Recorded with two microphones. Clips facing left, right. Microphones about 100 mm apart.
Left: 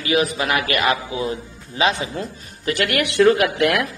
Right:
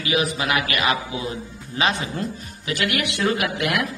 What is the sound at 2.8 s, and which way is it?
Speech, 50° left (ahead or behind).